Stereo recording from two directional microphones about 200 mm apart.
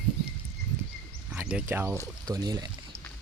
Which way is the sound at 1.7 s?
10° right (ahead or behind).